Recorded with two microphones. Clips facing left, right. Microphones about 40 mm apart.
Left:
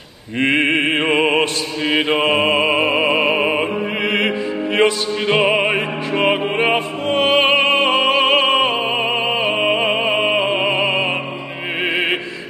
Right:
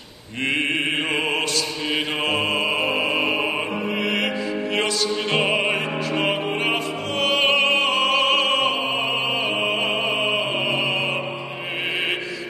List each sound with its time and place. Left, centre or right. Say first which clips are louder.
0.4 s mantra: left 6 dB; left
3.0 s music: left 6 dB; left